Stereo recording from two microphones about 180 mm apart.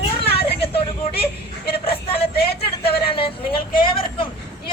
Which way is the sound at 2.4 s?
60° left (ahead or behind).